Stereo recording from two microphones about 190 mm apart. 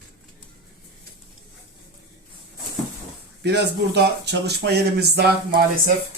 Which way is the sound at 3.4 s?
60° right (ahead or behind).